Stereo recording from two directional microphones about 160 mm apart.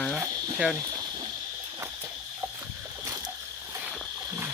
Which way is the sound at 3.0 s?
20° right (ahead or behind).